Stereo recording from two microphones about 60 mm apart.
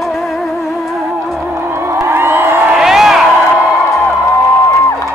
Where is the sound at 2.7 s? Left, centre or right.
Centre.